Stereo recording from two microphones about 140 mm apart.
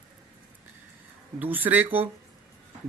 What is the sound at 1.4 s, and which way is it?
Speech, 15° right (ahead or behind).